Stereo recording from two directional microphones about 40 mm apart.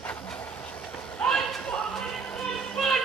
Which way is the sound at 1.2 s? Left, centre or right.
Left.